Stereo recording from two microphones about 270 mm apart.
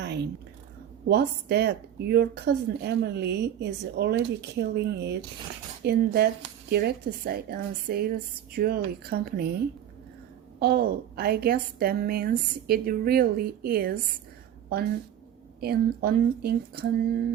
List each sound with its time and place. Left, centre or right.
0.0 s a sound: right
1.0 s speech: right
10.6 s speech: right
15.6 s speech: right